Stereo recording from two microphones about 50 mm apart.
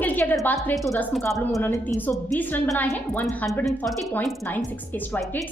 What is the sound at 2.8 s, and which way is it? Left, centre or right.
Speech, left.